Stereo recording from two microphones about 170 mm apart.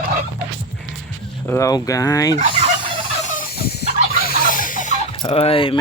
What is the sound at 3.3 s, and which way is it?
Fowl, 65° left (ahead or behind).